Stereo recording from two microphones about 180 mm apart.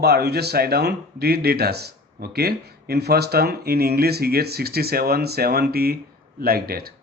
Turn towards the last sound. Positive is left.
turn(degrees=-60)  # may be behind; listen again after turning